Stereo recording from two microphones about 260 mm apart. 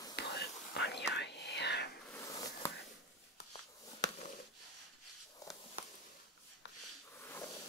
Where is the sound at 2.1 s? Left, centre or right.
Centre.